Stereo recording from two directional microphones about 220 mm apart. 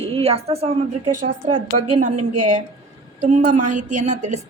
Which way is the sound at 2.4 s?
35° right (ahead or behind).